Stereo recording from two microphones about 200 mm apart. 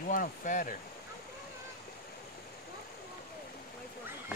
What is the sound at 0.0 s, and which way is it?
Speech, 45° left (ahead or behind).